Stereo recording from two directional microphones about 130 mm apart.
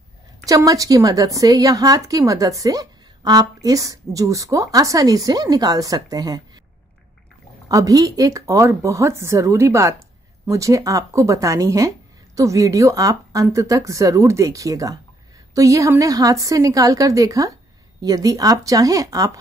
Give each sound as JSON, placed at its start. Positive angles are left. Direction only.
{"t": 0.5, "sound": "a woman's voice", "side_deg": -25}
{"t": 7.6, "sound": "a woman's voice", "side_deg": -25}